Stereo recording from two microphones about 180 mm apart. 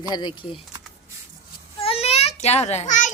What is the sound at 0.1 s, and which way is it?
Speech, 25° left (ahead or behind).